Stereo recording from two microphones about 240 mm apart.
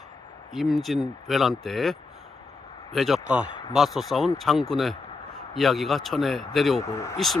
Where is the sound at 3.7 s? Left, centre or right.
Centre.